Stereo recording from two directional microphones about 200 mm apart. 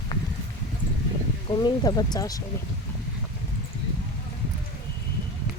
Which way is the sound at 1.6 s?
20° left (ahead or behind).